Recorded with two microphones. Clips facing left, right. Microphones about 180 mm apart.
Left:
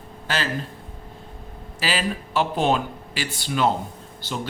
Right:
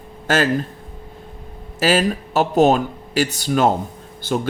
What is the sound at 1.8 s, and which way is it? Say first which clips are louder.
Speech: right 8 dB; 45° right (ahead or behind).